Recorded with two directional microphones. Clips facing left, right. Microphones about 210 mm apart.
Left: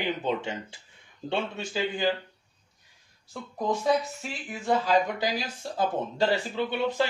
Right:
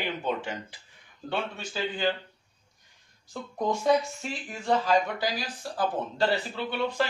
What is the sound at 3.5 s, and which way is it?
Speech, centre (ahead or behind).